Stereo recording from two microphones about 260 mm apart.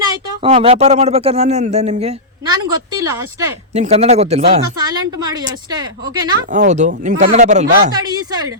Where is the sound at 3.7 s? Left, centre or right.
Right.